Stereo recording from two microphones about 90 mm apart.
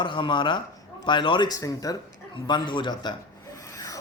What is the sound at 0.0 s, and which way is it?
A man's voice, 65° left (ahead or behind).